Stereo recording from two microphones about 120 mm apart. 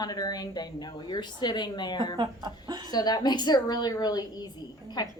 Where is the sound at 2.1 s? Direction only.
35° right (ahead or behind).